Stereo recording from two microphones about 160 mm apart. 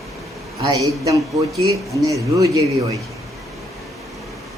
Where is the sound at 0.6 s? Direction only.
20° right (ahead or behind).